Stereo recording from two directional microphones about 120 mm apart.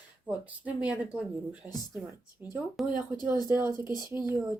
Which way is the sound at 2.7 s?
5° right (ahead or behind).